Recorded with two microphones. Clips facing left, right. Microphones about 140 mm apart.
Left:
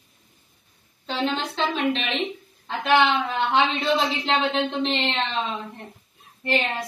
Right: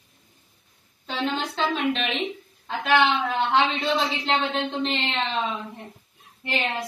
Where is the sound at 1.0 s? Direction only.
Centre (ahead or behind).